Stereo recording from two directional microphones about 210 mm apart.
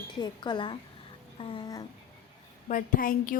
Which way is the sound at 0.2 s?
20° left (ahead or behind).